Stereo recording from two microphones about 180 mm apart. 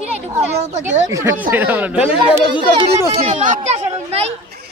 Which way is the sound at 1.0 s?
15° right (ahead or behind).